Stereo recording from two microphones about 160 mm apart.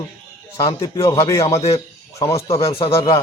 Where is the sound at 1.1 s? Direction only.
20° left (ahead or behind).